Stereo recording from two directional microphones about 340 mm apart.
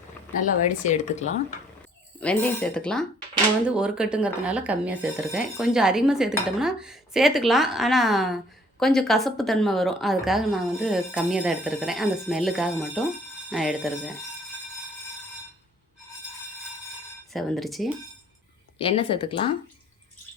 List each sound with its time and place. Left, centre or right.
0.9 s speech: left
2.2 s speech: centre
17.3 s speech: centre
18.8 s speech: centre